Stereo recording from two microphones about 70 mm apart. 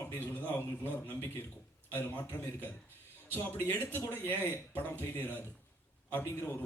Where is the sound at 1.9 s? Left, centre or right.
Left.